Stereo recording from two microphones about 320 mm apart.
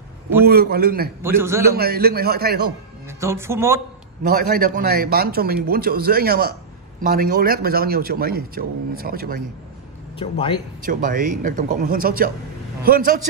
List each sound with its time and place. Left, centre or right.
0.5 s a man's voice: right
1.2 s speech: centre
1.6 s a man's voice: right
3.1 s speech: centre
4.2 s a man's voice: right
10.1 s speech: centre
10.8 s a man's voice: right